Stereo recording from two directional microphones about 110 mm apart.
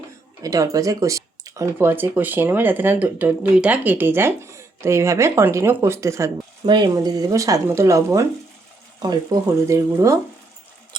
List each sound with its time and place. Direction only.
0.4 s speech: 30° right (ahead or behind)
6.7 s speech: 45° right (ahead or behind); by 10.2 s 30° right (ahead or behind)